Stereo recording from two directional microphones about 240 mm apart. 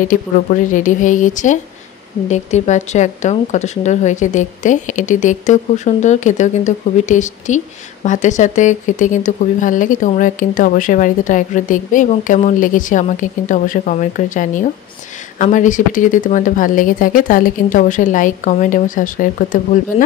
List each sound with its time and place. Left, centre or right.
0.1 s speech: left